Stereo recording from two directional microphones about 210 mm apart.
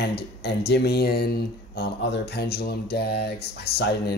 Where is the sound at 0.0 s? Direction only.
50° left (ahead or behind).